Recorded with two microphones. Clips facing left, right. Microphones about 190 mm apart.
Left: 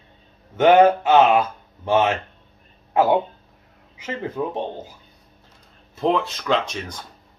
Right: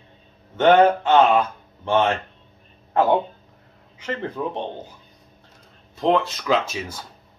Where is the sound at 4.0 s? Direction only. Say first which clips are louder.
Left 1 dB; 10° left (ahead or behind).